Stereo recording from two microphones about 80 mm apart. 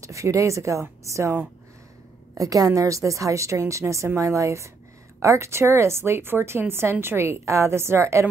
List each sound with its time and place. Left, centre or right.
0.0 s a woman's voice: right
2.3 s a woman's voice: right